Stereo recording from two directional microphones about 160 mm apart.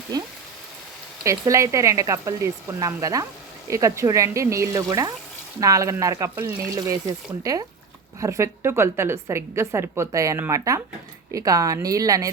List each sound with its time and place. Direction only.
1.2 s speech: 20° right (ahead or behind)
6.7 s a woman's voice: 25° right (ahead or behind)